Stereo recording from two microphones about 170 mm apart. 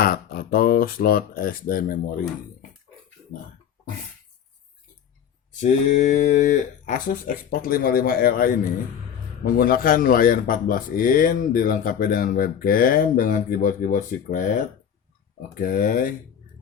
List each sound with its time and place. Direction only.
0.0 s speech: 60° left (ahead or behind)
5.5 s speech: 45° left (ahead or behind)